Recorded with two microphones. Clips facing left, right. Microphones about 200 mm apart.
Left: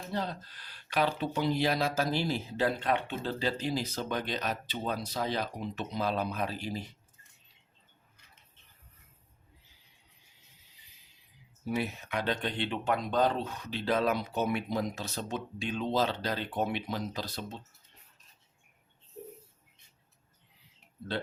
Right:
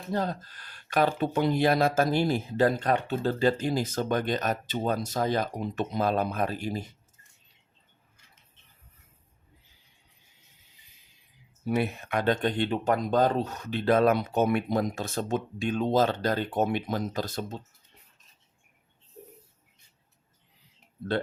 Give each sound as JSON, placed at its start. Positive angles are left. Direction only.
{"t": 0.1, "sound": "speech", "side_deg": -45}
{"t": 11.6, "sound": "speech", "side_deg": -60}